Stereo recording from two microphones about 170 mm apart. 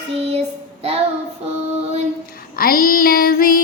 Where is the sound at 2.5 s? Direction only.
55° left (ahead or behind).